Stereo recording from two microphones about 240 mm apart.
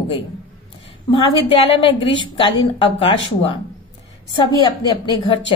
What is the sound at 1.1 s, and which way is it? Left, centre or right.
A woman's voice, left.